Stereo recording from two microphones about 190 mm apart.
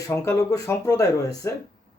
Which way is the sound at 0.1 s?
15° left (ahead or behind).